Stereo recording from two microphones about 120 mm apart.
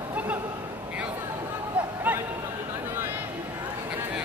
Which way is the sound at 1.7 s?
10° right (ahead or behind).